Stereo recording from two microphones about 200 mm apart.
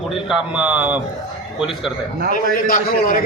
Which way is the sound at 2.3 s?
45° left (ahead or behind).